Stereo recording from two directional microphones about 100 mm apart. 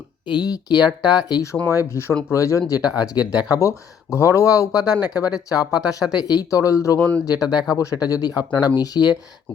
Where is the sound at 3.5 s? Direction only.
30° left (ahead or behind).